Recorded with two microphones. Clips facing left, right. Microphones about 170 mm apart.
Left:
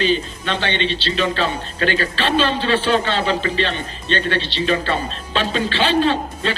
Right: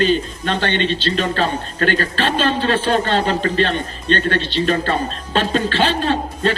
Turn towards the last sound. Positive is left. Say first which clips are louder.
# even
turn(degrees=-45)  # may be behind; listen again after turning